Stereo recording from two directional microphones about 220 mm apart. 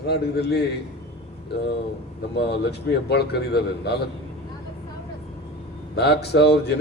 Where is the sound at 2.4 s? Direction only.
50° left (ahead or behind).